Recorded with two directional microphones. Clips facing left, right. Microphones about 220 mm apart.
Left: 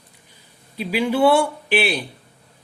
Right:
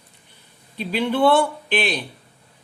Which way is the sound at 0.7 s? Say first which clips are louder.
Left 1 dB; 10° left (ahead or behind).